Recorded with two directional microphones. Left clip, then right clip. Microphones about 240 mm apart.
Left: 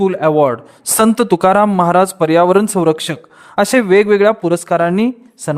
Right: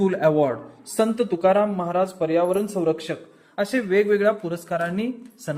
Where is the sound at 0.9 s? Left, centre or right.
Left.